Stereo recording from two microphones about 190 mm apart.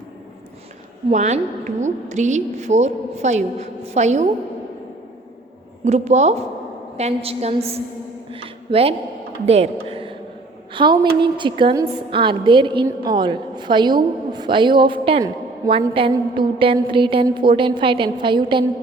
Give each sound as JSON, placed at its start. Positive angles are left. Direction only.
{"t": 1.1, "sound": "a woman's voice", "side_deg": -40}
{"t": 5.8, "sound": "a woman's voice", "side_deg": -35}
{"t": 9.9, "sound": "a sound", "side_deg": -30}
{"t": 10.8, "sound": "a woman's voice", "side_deg": -25}